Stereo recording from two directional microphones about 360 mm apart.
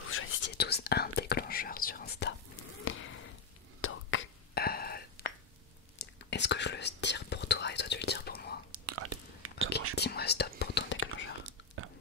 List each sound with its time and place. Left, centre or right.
0.1 s whispering: left
2.8 s a sound: left
3.8 s whispering: left
8.7 s whispering: right
9.9 s whispering: left
11.4 s whispering: right